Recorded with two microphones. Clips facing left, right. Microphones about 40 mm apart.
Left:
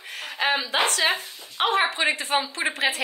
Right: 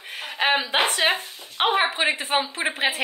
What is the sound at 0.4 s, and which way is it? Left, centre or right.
Speech, right.